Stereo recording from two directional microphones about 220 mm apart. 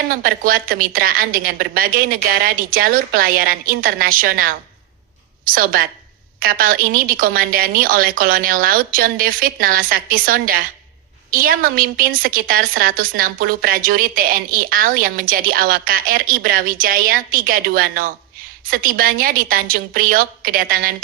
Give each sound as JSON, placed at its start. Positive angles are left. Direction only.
{"t": 0.1, "sound": "a woman's voice", "side_deg": -40}